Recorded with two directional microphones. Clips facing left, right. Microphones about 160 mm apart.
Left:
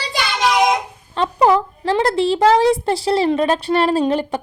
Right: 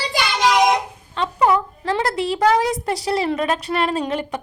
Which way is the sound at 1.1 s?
35° left (ahead or behind).